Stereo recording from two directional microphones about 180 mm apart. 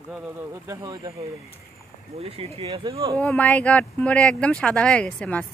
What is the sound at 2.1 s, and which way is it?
Speech, 35° right (ahead or behind).